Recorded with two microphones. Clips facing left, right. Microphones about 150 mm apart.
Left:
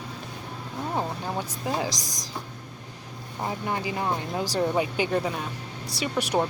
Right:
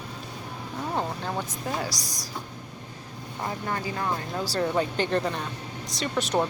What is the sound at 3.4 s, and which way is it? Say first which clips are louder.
Speech: left 2 dB; 15° left (ahead or behind).